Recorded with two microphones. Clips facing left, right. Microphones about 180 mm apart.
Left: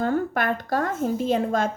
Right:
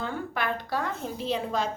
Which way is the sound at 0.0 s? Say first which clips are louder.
Left 8 dB; 45° left (ahead or behind).